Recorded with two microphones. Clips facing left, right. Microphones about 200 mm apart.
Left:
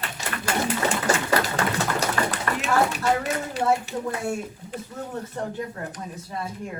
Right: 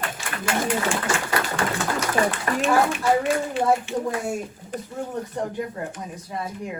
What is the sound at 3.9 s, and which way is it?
Speech, 40° left (ahead or behind).